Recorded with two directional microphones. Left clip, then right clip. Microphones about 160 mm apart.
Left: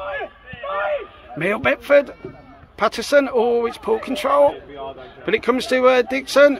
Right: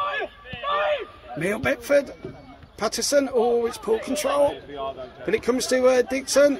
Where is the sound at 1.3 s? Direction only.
5° left (ahead or behind).